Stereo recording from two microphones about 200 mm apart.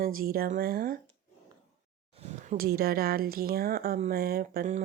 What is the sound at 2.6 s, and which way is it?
Speech, 50° right (ahead or behind).